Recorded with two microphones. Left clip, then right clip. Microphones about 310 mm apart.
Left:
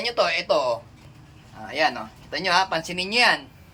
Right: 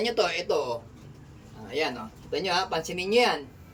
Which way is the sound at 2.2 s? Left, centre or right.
Left.